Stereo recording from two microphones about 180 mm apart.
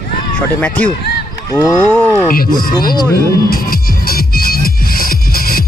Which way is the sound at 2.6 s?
55° left (ahead or behind).